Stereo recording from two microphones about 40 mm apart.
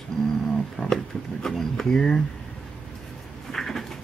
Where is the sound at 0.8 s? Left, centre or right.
Left.